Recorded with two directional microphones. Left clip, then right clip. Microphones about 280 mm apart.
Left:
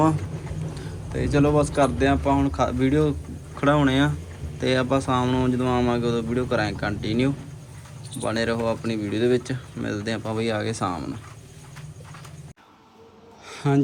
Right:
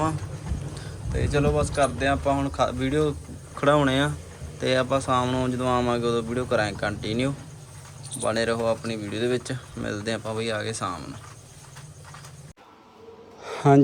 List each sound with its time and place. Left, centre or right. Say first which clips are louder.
0.7 s speech: left 1 dB; centre